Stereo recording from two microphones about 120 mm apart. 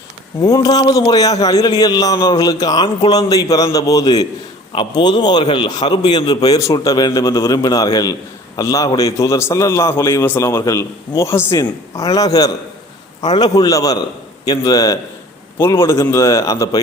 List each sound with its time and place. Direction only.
0.4 s a man's voice: 35° left (ahead or behind)
4.7 s a man's voice: 45° left (ahead or behind); by 11.6 s 20° left (ahead or behind)
11.6 s a man's voice: 30° left (ahead or behind)
15.5 s a man's voice: 20° left (ahead or behind)